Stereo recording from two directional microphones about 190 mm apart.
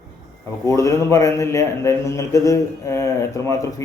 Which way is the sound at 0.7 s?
15° left (ahead or behind).